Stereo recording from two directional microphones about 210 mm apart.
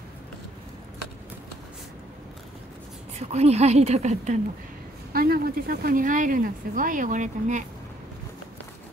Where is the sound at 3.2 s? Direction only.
30° right (ahead or behind).